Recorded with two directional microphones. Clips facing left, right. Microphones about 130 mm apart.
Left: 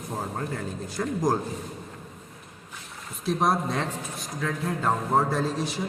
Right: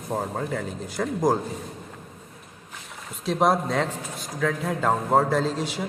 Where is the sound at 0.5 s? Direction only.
90° right.